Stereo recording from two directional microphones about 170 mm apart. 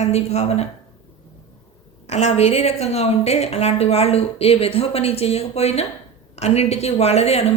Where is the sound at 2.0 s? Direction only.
40° left (ahead or behind).